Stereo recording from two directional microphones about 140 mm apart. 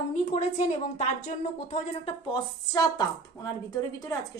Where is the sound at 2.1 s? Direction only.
30° left (ahead or behind).